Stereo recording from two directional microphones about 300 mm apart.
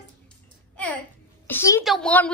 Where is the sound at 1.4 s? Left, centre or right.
Centre.